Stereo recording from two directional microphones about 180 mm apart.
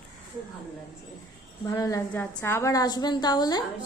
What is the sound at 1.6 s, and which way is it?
A woman's voice, 20° left (ahead or behind).